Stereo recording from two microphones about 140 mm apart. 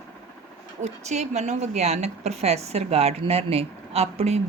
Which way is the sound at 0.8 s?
55° right (ahead or behind).